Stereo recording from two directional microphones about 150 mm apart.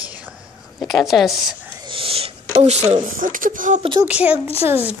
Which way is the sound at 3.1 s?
65° right (ahead or behind).